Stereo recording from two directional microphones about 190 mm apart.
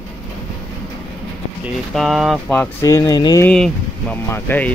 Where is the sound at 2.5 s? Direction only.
20° left (ahead or behind).